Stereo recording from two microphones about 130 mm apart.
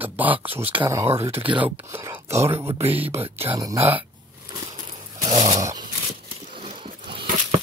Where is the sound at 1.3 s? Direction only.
40° right (ahead or behind).